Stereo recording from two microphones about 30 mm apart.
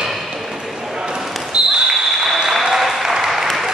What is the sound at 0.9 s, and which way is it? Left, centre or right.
Basketball bounce, right.